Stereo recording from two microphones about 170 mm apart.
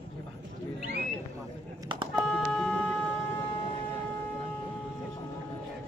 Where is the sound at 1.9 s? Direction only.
30° right (ahead or behind).